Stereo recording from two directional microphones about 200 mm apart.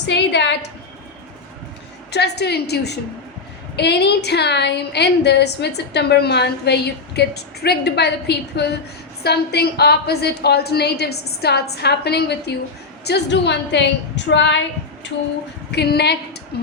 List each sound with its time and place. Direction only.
0.1 s a woman's voice: 60° left (ahead or behind)
2.1 s a woman's voice: 55° left (ahead or behind)
15.7 s a woman's voice: 55° left (ahead or behind)